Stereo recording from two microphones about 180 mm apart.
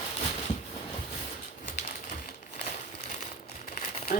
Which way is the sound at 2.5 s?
40° left (ahead or behind).